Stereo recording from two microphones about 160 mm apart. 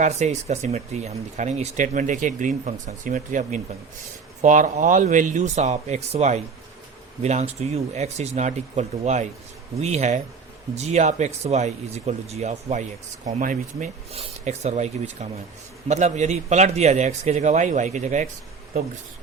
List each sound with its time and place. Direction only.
0.0 s speech: 45° right (ahead or behind)
13.4 s speech: 55° right (ahead or behind)
14.1 s speech: 40° right (ahead or behind)